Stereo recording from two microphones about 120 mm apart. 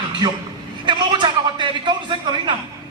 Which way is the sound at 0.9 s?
40° right (ahead or behind).